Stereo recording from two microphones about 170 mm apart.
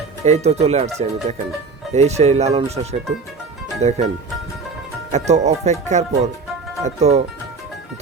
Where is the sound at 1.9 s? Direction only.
40° right (ahead or behind).